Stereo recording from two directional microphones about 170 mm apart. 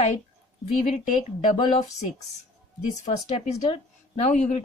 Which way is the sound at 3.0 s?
40° left (ahead or behind).